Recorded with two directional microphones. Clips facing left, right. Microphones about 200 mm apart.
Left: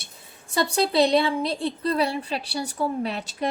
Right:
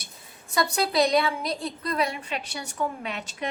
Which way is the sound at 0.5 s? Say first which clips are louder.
Left 2 dB; 30° left (ahead or behind).